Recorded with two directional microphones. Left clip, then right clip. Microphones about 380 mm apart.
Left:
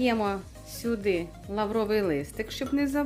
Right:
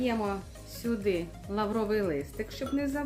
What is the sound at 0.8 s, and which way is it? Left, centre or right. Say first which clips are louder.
Speech: left 3 dB; centre.